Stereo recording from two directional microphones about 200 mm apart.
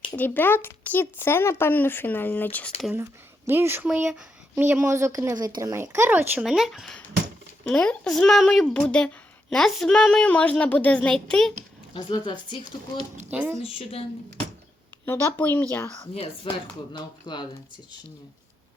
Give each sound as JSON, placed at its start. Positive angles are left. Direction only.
{"t": 0.2, "sound": "speech", "side_deg": 10}
{"t": 2.8, "sound": "speech", "side_deg": -10}
{"t": 11.9, "sound": "speech", "side_deg": 25}
{"t": 13.3, "sound": "speech", "side_deg": -5}
{"t": 13.6, "sound": "speech", "side_deg": 30}
{"t": 15.0, "sound": "speech", "side_deg": 10}
{"t": 16.1, "sound": "speech", "side_deg": 30}